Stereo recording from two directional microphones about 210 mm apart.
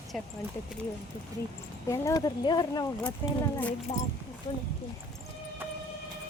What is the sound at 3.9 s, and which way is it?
Speech, 35° left (ahead or behind).